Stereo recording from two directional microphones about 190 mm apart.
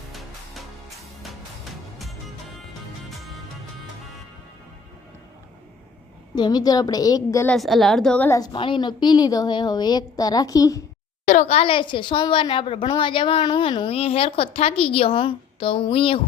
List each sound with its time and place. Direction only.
0.1 s music: centre (ahead or behind)
6.3 s a woman's voice: 20° left (ahead or behind)
7.5 s a woman's voice: centre (ahead or behind)
8.4 s a woman's voice: 25° left (ahead or behind)
11.3 s a woman's voice: 35° left (ahead or behind)